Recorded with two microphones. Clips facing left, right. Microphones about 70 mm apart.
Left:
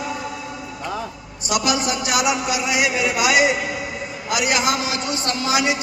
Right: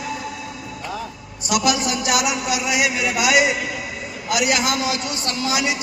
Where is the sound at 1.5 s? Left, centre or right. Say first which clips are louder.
Right 1 dB; left.